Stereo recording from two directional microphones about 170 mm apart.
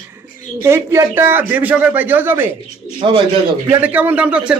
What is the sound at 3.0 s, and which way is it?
Speech, 35° right (ahead or behind).